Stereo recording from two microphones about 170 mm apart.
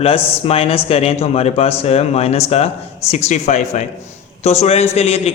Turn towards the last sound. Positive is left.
turn(degrees=35)  # may be behind; listen again after turning